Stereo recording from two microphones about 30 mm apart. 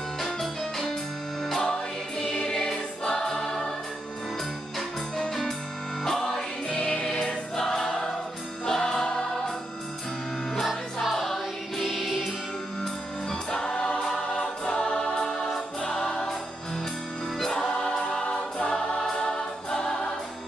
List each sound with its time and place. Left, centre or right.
1.6 s music: left
2.4 s choir: left
6.0 s music: centre
6.9 s choir: left
8.6 s music: centre
10.6 s music: centre
11.8 s music: centre
13.5 s choir: left
15.1 s music: centre
17.9 s choir: centre